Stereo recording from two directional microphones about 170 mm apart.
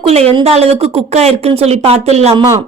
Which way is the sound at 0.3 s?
35° right (ahead or behind).